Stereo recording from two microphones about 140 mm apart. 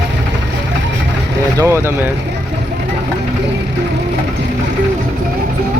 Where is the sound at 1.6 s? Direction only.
20° right (ahead or behind).